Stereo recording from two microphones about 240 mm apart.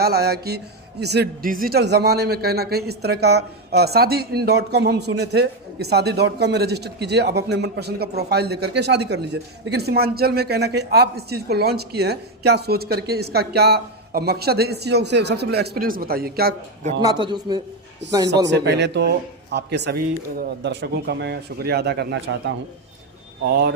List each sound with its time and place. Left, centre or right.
0.0 s a man's voice: right
17.0 s a man's voice: centre
18.0 s a man's voice: right